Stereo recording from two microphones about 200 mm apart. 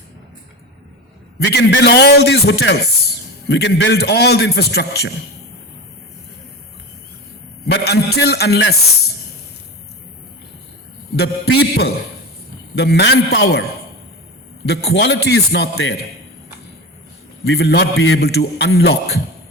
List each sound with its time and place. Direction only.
1.5 s a man's voice: 55° left (ahead or behind)
7.7 s a man's voice: 55° left (ahead or behind)
11.2 s a man's voice: 55° left (ahead or behind)
14.8 s a man's voice: 60° left (ahead or behind)
17.4 s a man's voice: 55° left (ahead or behind); by 18.2 s 70° left (ahead or behind)
18.2 s speech: 55° left (ahead or behind)